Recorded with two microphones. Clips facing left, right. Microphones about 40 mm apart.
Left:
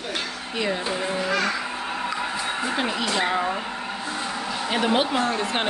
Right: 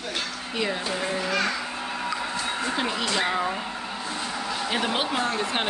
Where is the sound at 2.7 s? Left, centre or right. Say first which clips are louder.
Left 2 dB; centre.